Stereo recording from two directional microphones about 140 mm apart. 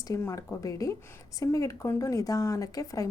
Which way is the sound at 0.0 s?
20° left (ahead or behind).